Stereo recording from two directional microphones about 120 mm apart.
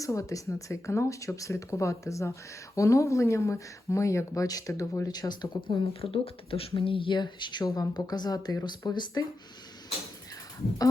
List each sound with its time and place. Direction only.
0.0 s speech: 25° left (ahead or behind)
5.9 s speech: 55° left (ahead or behind); by 9.2 s 35° left (ahead or behind)